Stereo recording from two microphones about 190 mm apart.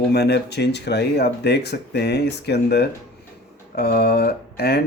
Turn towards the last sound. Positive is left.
turn(degrees=55)  # may be behind; listen again after turning